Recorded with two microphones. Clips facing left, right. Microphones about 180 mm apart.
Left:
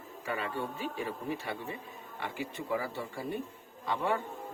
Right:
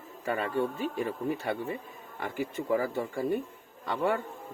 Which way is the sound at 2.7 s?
45° right (ahead or behind).